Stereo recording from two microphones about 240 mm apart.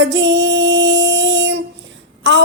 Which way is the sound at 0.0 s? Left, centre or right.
Right.